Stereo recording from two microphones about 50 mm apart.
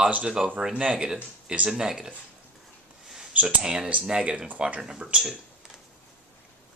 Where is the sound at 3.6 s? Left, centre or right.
Centre.